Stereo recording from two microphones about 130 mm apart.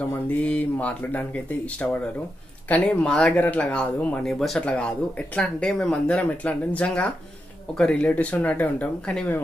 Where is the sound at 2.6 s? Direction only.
10° left (ahead or behind).